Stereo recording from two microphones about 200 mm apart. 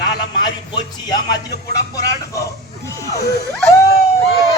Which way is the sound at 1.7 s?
15° left (ahead or behind).